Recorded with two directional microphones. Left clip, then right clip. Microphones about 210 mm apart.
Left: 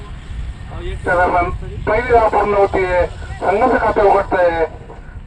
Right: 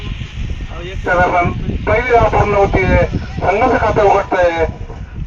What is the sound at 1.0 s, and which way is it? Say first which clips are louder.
A man's voice: right 2 dB; 35° right (ahead or behind).